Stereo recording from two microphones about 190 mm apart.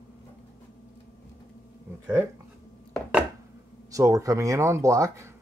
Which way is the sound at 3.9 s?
15° right (ahead or behind).